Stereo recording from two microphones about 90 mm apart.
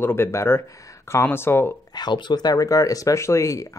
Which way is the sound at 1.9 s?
55° left (ahead or behind).